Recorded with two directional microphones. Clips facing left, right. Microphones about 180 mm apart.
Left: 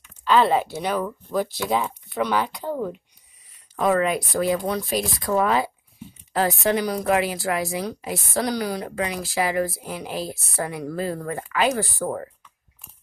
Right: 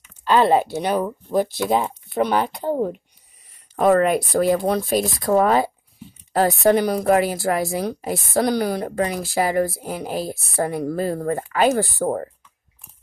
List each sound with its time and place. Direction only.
0.2 s a woman's voice: 45° right (ahead or behind)
3.7 s a woman's voice: 50° right (ahead or behind)